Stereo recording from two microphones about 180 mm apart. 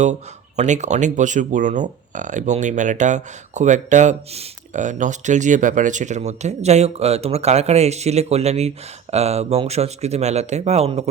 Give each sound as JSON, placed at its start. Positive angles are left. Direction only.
{"t": 0.0, "sound": "speech", "side_deg": -40}